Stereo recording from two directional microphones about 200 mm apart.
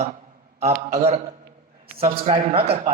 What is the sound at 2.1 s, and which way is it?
Speech, 30° right (ahead or behind).